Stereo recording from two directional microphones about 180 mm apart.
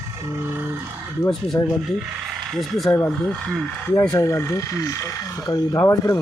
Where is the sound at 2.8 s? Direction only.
15° left (ahead or behind).